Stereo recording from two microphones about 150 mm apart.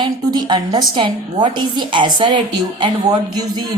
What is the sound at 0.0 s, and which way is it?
A woman's voice, 30° right (ahead or behind).